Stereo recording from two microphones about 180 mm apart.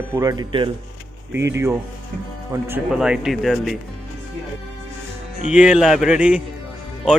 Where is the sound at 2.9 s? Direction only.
Centre (ahead or behind).